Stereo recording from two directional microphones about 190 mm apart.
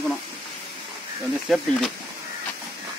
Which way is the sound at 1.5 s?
Centre (ahead or behind).